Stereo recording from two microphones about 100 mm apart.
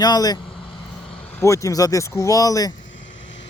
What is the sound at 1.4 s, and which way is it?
Speech, 30° left (ahead or behind).